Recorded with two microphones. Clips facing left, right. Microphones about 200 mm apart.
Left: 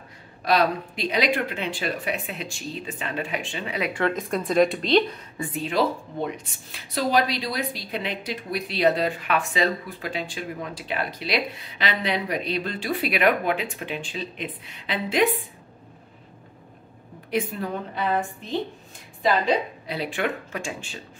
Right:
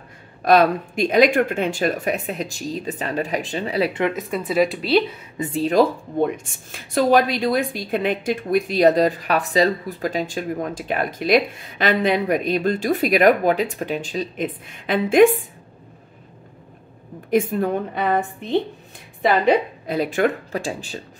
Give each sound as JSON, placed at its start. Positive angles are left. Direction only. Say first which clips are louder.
{"t": 0.5, "sound": "speech", "louder": "right 6 dB", "side_deg": -50}
{"t": 4.1, "sound": "speech", "louder": "right 1 dB", "side_deg": -5}
{"t": 5.4, "sound": "speech", "louder": "right 7 dB", "side_deg": -30}
{"t": 5.7, "sound": "speech", "louder": "right 6 dB", "side_deg": -50}
{"t": 17.3, "sound": "a woman's voice", "louder": "right 7 dB", "side_deg": -45}